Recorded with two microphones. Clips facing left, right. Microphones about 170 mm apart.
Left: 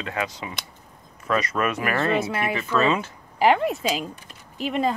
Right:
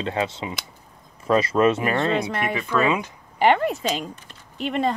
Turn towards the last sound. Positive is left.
turn(degrees=0)  # may be behind; listen again after turning